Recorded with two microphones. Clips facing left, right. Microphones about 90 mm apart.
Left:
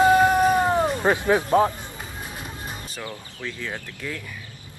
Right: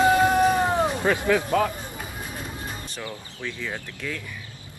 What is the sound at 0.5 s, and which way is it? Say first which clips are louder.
Music: left 2 dB; 15° left (ahead or behind).